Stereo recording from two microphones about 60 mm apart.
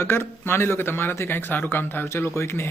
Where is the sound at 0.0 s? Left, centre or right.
Left.